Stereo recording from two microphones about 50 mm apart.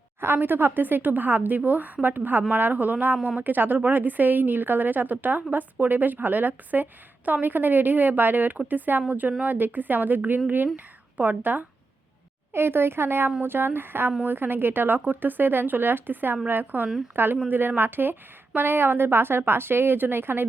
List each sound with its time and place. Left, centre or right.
0.2 s speech: right
12.5 s a woman's voice: right